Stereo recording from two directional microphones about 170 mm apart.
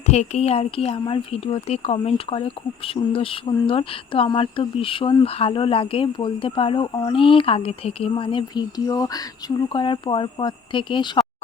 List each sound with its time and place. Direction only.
0.1 s speech: 40° left (ahead or behind)